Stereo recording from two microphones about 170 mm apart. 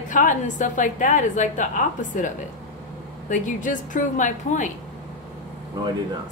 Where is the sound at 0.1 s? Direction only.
50° left (ahead or behind).